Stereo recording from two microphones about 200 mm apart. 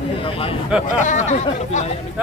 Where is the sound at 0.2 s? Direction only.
25° left (ahead or behind).